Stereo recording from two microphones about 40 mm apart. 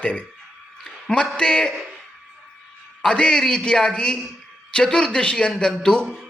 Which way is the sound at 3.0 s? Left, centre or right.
Left.